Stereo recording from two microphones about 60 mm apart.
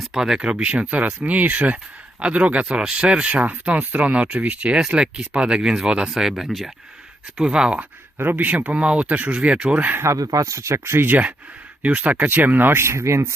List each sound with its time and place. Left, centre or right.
0.0 s a sound: centre
0.3 s speech: centre
7.8 s speech: right
10.2 s speech: right
11.0 s speech: right